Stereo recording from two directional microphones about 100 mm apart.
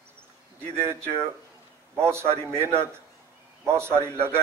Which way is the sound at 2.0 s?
25° right (ahead or behind).